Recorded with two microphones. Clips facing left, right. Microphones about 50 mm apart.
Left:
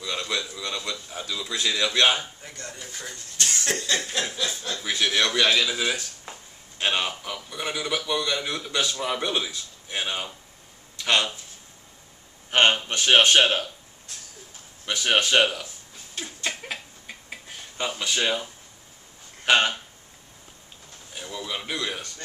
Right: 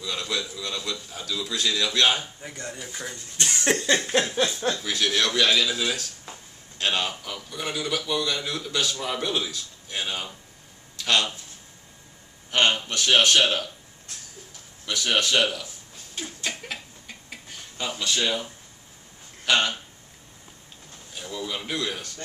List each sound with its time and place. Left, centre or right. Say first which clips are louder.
0.0 s a sound: left 1 dB; centre
0.6 s a man's voice: even; centre
2.4 s speech: right 3 dB; centre
3.3 s a sound: right 3 dB; right
4.7 s a man's voice: left 1 dB; centre
11.0 s a sound: left 1 dB; centre
12.4 s speech: left 2 dB; left
14.9 s speech: left 2 dB; left
16.5 s a sound: left 2 dB; centre
17.7 s speech: left 1 dB; left
19.4 s speech: left 2 dB; centre
21.3 s a man's voice: right 1 dB; centre